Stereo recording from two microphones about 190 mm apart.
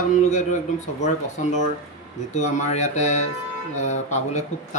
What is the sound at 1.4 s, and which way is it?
Speech, 40° left (ahead or behind).